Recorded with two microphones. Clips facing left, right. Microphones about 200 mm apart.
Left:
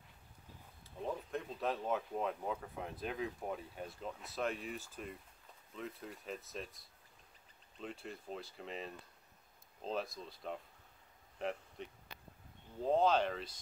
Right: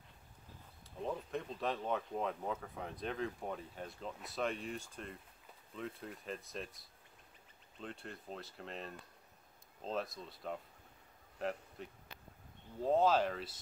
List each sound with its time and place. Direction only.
0.8 s speech: centre (ahead or behind)